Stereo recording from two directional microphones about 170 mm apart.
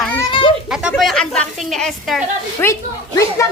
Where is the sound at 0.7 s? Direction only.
Centre (ahead or behind).